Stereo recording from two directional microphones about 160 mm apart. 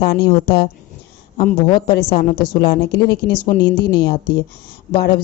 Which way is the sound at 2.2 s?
65° left (ahead or behind).